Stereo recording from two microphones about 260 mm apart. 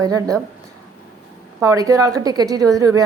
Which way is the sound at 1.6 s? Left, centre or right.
Centre.